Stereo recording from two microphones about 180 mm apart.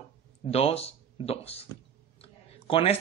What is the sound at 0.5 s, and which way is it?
Speech, 35° left (ahead or behind).